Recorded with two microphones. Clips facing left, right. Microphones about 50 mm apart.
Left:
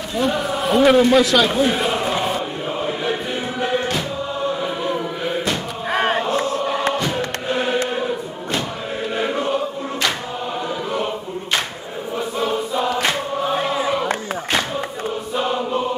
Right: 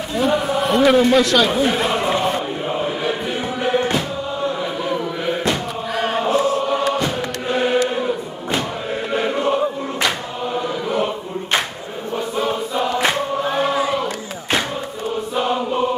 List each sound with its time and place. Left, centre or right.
0.1 s a man's voice: centre
3.6 s music: centre
5.9 s chant: left
7.0 s chant: centre
9.1 s choir: centre
12.4 s choir: centre
15.3 s choir: centre